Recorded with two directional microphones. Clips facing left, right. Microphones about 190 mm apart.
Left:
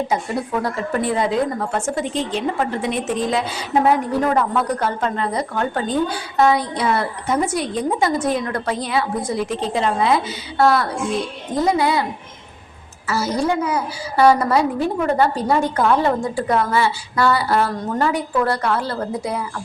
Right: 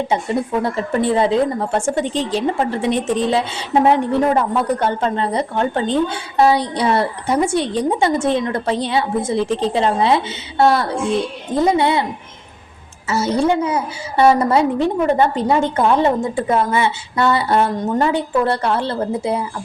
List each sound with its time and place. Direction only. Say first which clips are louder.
0.6 s a woman's voice: right 3 dB; 30° right (ahead or behind)
13.1 s a woman's voice: right 3 dB; 25° right (ahead or behind)